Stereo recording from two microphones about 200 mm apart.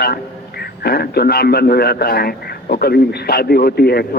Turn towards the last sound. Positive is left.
turn(degrees=50)  # may be behind; listen again after turning